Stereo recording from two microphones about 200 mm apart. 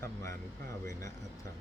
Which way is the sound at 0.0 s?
15° left (ahead or behind).